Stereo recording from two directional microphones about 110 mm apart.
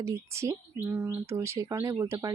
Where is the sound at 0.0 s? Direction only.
25° right (ahead or behind).